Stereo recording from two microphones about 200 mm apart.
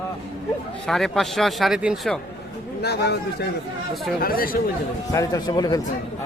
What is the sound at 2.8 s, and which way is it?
Speech, 55° left (ahead or behind).